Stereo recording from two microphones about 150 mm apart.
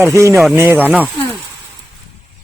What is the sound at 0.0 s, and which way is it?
Speech, 20° right (ahead or behind).